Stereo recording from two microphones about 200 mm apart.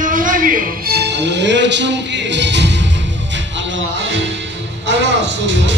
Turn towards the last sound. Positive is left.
turn(degrees=-65)  # may be behind; listen again after turning